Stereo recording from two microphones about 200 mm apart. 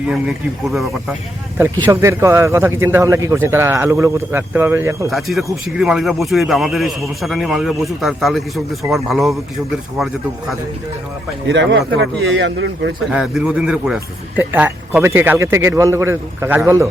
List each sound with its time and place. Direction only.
0.1 s speech: centre (ahead or behind)
1.8 s a man's voice: 15° right (ahead or behind)
5.1 s speech: centre (ahead or behind)
11.4 s a man's voice: 60° right (ahead or behind)
13.1 s a man's voice: 5° right (ahead or behind)